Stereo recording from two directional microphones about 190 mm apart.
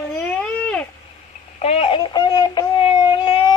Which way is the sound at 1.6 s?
30° left (ahead or behind).